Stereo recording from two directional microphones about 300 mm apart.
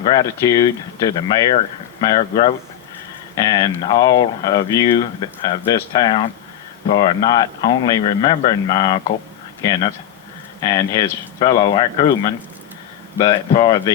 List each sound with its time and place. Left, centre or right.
0.0 s a man's voice: centre
10.6 s a man's voice: centre